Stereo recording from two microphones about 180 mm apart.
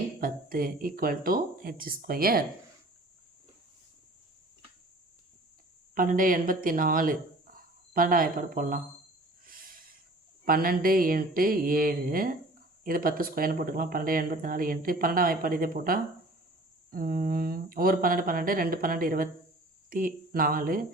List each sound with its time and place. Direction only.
0.2 s speech: 55° right (ahead or behind)
5.9 s speech: 50° right (ahead or behind)
10.4 s speech: 55° right (ahead or behind)